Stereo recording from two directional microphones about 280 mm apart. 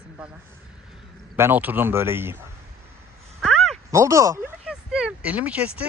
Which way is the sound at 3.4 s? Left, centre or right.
Centre.